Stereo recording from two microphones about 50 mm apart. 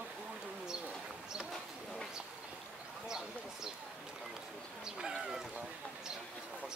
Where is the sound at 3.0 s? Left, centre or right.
Centre.